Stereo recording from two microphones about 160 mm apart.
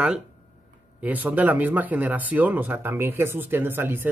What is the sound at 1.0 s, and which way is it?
Speech, 10° right (ahead or behind).